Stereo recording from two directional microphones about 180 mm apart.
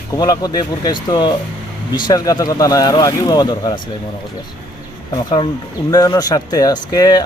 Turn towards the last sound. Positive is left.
turn(degrees=20)  # may be behind; listen again after turning